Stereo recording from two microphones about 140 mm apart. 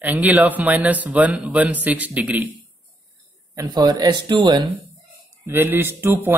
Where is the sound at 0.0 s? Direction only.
10° right (ahead or behind).